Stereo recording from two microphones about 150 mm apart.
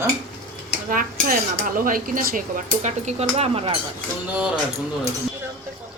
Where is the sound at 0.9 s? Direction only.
65° right (ahead or behind); by 3.8 s 40° right (ahead or behind).